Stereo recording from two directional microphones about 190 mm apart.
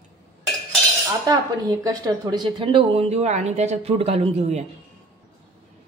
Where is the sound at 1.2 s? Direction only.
20° right (ahead or behind); by 4.6 s 35° right (ahead or behind).